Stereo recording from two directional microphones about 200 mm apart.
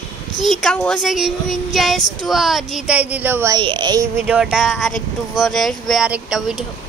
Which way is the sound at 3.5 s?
25° right (ahead or behind).